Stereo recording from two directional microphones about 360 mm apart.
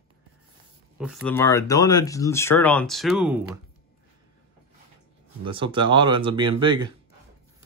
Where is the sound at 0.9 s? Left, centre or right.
Centre.